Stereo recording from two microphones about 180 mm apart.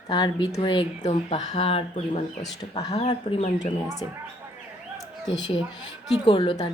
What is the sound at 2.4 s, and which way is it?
Speech, 20° left (ahead or behind).